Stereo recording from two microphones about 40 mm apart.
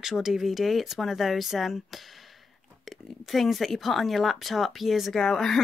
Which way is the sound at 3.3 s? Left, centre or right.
Centre.